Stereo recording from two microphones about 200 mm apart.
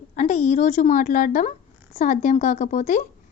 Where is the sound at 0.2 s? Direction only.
35° left (ahead or behind).